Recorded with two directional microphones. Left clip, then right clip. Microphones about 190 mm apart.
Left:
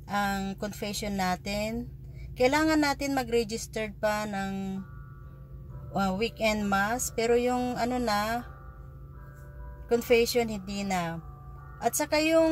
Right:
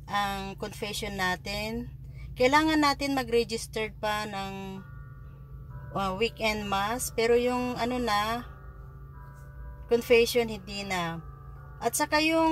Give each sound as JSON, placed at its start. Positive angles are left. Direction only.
{"t": 0.1, "sound": "speech", "side_deg": 0}
{"t": 5.9, "sound": "speech", "side_deg": 0}
{"t": 9.8, "sound": "speech", "side_deg": 0}